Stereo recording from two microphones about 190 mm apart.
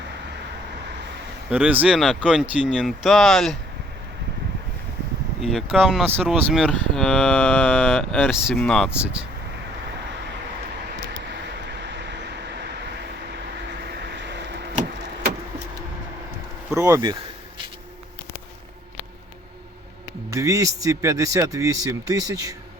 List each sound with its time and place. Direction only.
1.5 s speech: 5° right (ahead or behind)
5.4 s speech: centre (ahead or behind)
11.8 s vehicle: 65° right (ahead or behind)
13.9 s vehicle: 65° right (ahead or behind)
16.7 s speech: 15° right (ahead or behind)
20.3 s speech: 15° right (ahead or behind)